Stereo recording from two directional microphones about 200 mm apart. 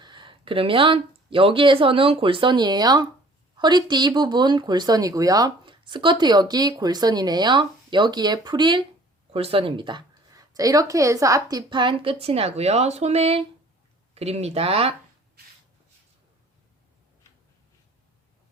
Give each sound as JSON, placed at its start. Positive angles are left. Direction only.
{"t": 0.0, "sound": "speech", "side_deg": -25}